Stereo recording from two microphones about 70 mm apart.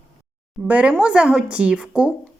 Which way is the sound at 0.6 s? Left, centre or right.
Centre.